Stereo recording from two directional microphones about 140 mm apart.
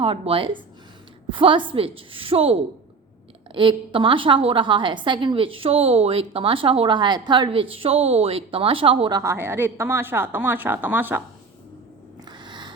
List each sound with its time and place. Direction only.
0.0 s a woman's voice: 40° right (ahead or behind)
9.2 s speech: 15° right (ahead or behind)
12.2 s a sound: 30° right (ahead or behind)